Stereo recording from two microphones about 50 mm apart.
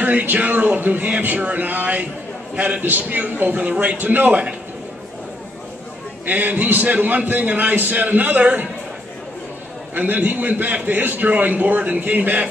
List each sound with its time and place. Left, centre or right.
0.0 s a man's voice: right
6.2 s a man's voice: right
9.9 s a man's voice: right